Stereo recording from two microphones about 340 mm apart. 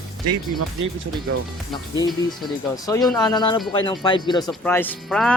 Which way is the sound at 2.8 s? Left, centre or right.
Centre.